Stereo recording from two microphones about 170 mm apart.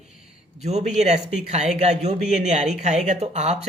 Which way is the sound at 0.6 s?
40° right (ahead or behind).